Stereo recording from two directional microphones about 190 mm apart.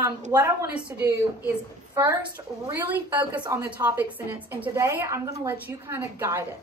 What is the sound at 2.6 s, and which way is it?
A woman's voice, 10° right (ahead or behind).